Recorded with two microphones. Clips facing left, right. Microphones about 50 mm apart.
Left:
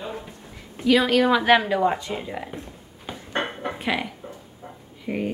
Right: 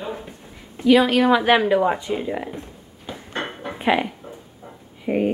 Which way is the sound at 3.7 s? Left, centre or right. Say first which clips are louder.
Right 8 dB; right.